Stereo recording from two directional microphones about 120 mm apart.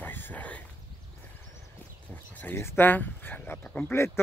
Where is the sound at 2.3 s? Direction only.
15° left (ahead or behind).